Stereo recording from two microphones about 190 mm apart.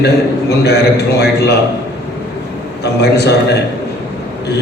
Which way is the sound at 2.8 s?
60° left (ahead or behind).